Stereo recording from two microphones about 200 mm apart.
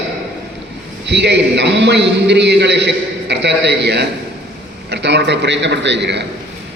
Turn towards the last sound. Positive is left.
turn(degrees=-60)  # may be behind; listen again after turning